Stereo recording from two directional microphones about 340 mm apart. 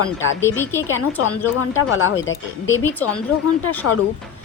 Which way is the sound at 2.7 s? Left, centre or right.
Centre.